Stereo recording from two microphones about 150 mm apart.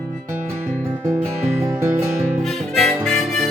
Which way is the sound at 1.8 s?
15° right (ahead or behind).